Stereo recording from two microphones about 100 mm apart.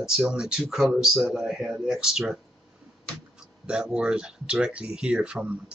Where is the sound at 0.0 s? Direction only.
5° right (ahead or behind).